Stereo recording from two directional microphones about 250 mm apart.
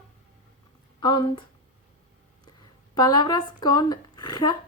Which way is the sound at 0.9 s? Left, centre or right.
Centre.